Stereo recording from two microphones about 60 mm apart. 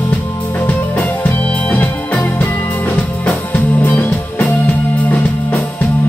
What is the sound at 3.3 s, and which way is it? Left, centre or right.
Music, left.